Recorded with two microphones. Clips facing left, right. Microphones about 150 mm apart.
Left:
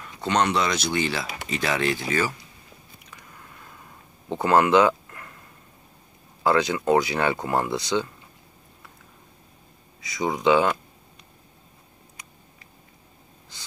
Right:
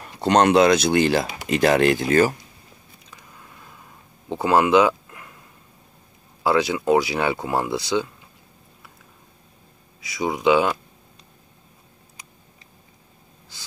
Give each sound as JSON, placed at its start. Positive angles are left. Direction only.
{"t": 0.0, "sound": "a sound", "side_deg": -35}
{"t": 0.4, "sound": "speech", "side_deg": -50}
{"t": 4.3, "sound": "speech", "side_deg": -10}
{"t": 6.4, "sound": "speech", "side_deg": -10}
{"t": 10.0, "sound": "speech", "side_deg": -5}